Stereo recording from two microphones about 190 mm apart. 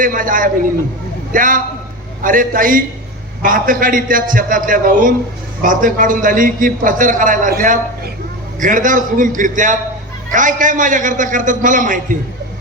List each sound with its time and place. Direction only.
0.0 s a man's voice: 45° right (ahead or behind)